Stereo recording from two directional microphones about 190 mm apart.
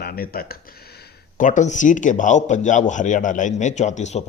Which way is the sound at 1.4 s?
40° left (ahead or behind).